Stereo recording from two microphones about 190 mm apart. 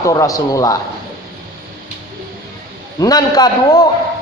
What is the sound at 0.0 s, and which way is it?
Speech, 15° left (ahead or behind).